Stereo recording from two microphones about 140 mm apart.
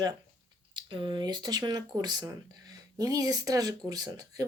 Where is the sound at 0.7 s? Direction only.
35° right (ahead or behind).